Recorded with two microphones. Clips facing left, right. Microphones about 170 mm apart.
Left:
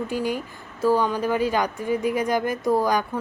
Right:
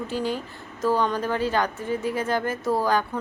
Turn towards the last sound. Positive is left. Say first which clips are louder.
# left 2 dB
turn(degrees=15)  # may be behind; listen again after turning